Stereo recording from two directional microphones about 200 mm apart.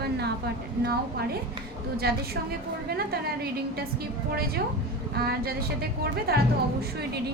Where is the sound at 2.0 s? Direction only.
50° right (ahead or behind).